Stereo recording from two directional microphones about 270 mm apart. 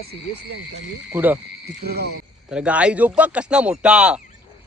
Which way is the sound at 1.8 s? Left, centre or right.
Right.